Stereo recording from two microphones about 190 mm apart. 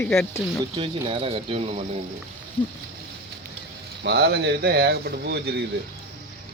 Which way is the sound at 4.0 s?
60° right (ahead or behind).